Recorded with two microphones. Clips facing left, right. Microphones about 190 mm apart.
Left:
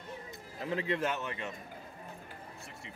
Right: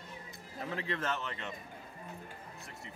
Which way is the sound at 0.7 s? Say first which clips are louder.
Left 4 dB; 15° left (ahead or behind).